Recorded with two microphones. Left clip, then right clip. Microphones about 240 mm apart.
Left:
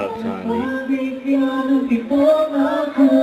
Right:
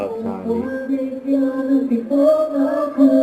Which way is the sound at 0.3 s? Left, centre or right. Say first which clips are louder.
Even; left.